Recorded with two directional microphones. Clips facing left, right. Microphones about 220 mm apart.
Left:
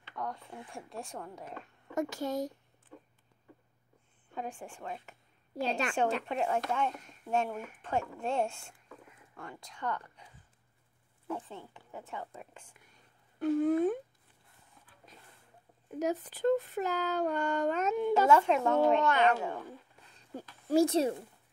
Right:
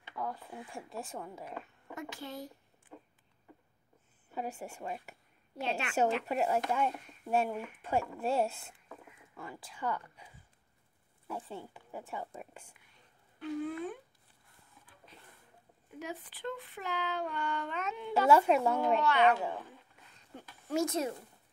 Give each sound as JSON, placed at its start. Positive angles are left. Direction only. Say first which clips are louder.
{"t": 0.1, "sound": "speech", "louder": "even", "side_deg": -5}
{"t": 2.0, "sound": "speech", "louder": "left 10 dB", "side_deg": 45}
{"t": 4.3, "sound": "speech", "louder": "right 1 dB", "side_deg": -5}
{"t": 5.6, "sound": "speech", "louder": "left 4 dB", "side_deg": 40}
{"t": 6.2, "sound": "speech", "louder": "right 1 dB", "side_deg": -5}
{"t": 13.4, "sound": "speech", "louder": "left 9 dB", "side_deg": 45}
{"t": 15.1, "sound": "a sound", "louder": "left 1 dB", "side_deg": 45}
{"t": 16.0, "sound": "speech", "louder": "left 10 dB", "side_deg": 40}
{"t": 18.3, "sound": "speech", "louder": "right 4 dB", "side_deg": -10}
{"t": 19.0, "sound": "speech", "louder": "even", "side_deg": 45}
{"t": 20.7, "sound": "speech", "louder": "left 6 dB", "side_deg": 30}